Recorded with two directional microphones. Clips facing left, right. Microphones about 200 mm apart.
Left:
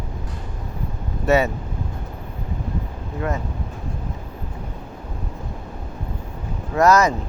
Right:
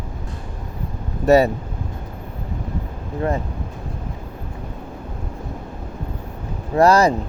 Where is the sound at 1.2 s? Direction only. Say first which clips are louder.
Right 5 dB; 35° right (ahead or behind).